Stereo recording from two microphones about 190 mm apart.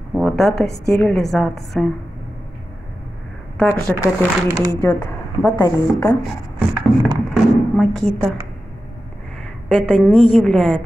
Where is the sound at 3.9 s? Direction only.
Centre (ahead or behind).